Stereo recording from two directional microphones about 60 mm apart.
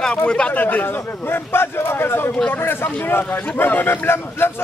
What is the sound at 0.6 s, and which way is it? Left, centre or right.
Speech, left.